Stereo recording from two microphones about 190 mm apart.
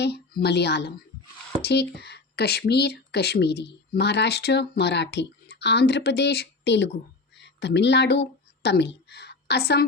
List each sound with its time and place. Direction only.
0.0 s speech: 60° left (ahead or behind)